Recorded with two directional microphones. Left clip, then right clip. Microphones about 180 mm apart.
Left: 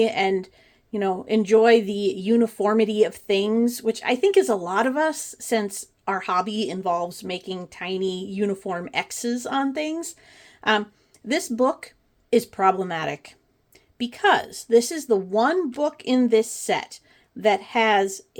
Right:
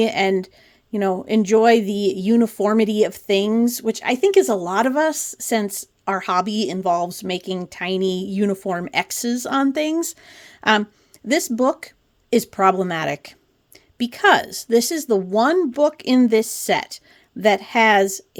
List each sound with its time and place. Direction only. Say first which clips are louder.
0.0 s speech: right 2 dB; 40° right (ahead or behind)